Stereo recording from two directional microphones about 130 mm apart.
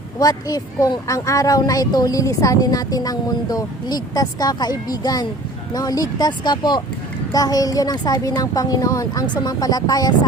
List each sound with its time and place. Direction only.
0.2 s speech: 30° left (ahead or behind)